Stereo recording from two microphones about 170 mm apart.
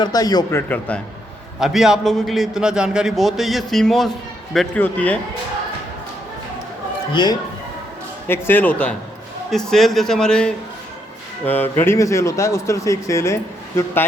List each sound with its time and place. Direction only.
0.0 s speech: 20° left (ahead or behind)
1.5 s a man's voice: centre (ahead or behind)
7.1 s speech: 25° left (ahead or behind)
8.3 s a man's voice: 10° left (ahead or behind)